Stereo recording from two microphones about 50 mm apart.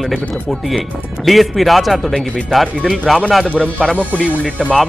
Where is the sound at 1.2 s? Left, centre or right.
Centre.